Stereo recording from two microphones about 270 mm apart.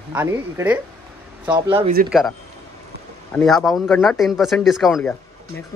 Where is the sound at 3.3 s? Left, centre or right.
Centre.